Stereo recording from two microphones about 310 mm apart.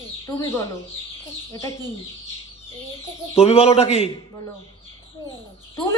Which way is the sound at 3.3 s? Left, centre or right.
Centre.